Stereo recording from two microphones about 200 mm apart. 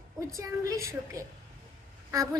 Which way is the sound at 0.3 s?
15° right (ahead or behind).